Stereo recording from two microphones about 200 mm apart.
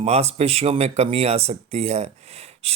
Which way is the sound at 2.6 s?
30° right (ahead or behind).